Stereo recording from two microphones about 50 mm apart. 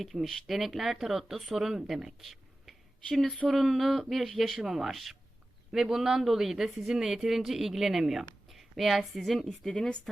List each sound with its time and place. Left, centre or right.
0.0 s a woman's voice: centre
9.7 s speech: left